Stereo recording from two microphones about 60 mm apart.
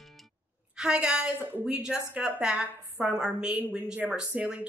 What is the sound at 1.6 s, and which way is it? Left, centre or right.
Speech, centre.